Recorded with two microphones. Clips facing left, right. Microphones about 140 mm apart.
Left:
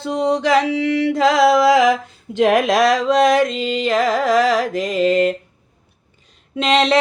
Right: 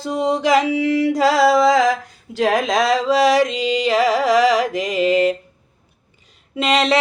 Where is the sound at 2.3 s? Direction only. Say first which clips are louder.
Left 4 dB; 25° left (ahead or behind).